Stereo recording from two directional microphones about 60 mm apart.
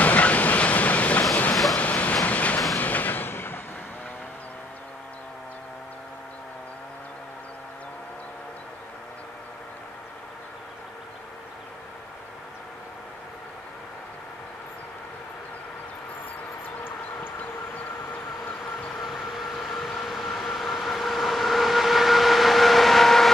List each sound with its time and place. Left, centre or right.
0.0 s train: left
1.5 s vehicle: centre
1.8 s train: left
2.8 s a sound: left
18.9 s train: centre